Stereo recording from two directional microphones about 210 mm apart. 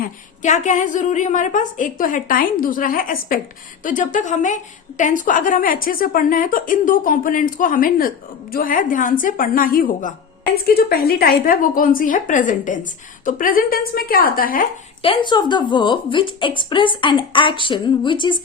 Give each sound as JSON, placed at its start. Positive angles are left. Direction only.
{"t": 0.0, "sound": "a woman's voice", "side_deg": 35}
{"t": 15.0, "sound": "a woman's voice", "side_deg": 25}